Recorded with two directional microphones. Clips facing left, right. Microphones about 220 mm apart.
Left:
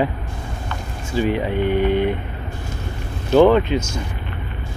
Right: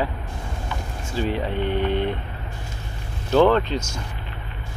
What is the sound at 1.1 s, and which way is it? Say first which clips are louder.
Speech: left 5 dB; 15° left (ahead or behind).